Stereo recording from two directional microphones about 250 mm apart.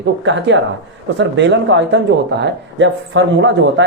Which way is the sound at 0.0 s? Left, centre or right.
Right.